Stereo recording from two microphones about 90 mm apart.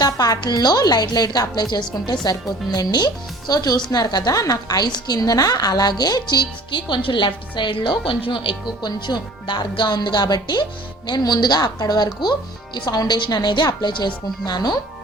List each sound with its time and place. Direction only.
0.0 s speech: 45° left (ahead or behind); by 8.5 s 80° left
8.8 s speech: 55° left (ahead or behind)